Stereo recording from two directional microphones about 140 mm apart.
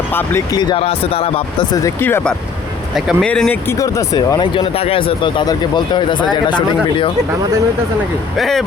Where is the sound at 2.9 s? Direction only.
Centre (ahead or behind).